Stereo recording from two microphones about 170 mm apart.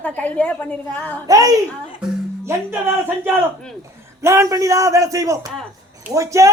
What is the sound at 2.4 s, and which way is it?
Music, 15° right (ahead or behind).